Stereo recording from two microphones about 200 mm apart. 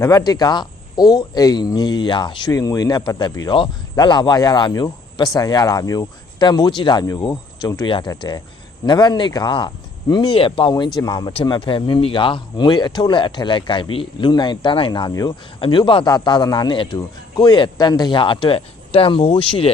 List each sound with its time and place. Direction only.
0.0 s speech: 20° left (ahead or behind)